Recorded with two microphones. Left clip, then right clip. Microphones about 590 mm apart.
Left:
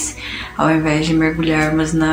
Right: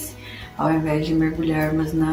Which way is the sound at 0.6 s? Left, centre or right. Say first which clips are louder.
Left 5 dB; right.